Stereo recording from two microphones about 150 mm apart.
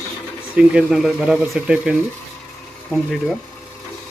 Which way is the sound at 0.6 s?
5° right (ahead or behind).